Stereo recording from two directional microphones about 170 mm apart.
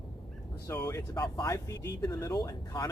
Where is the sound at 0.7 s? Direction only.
15° left (ahead or behind).